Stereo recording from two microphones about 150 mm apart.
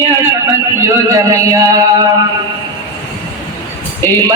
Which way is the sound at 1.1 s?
20° right (ahead or behind).